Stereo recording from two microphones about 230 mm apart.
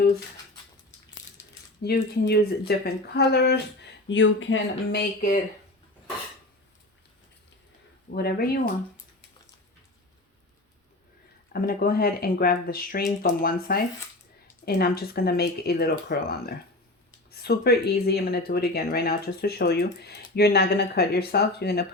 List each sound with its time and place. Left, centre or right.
1.8 s speech: left
8.1 s speech: left
11.5 s speech: left